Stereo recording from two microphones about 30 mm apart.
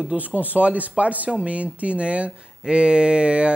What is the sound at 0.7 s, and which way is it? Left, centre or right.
Speech, right.